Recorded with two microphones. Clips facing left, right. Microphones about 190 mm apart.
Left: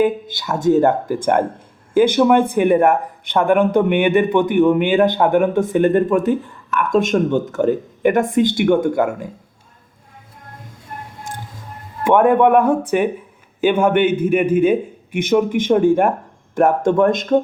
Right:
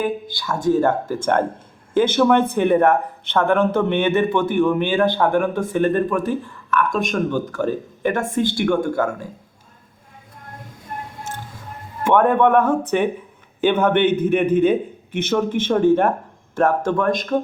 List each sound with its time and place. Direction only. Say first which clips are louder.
0.0 s speech: left 6 dB; 20° left (ahead or behind)
11.3 s music: left 2 dB; 10° left (ahead or behind)
12.0 s speech: left 3 dB; 15° left (ahead or behind)